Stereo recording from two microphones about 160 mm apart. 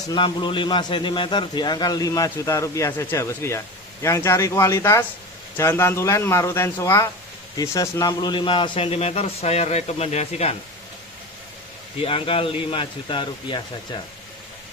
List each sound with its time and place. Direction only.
0.1 s a man's voice: 30° left (ahead or behind)
11.9 s a man's voice: 35° left (ahead or behind)